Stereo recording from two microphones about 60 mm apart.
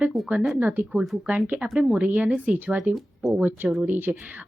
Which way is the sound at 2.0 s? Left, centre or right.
Right.